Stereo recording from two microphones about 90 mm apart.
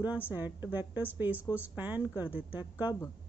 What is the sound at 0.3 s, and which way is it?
A woman's voice, 20° right (ahead or behind).